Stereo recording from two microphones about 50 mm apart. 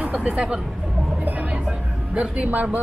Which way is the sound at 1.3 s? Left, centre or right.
Right.